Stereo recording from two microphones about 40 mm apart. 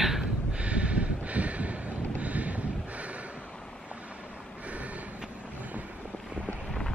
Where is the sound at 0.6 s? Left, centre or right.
Right.